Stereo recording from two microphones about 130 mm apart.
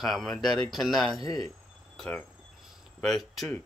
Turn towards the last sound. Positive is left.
turn(degrees=0)  # may be behind; listen again after turning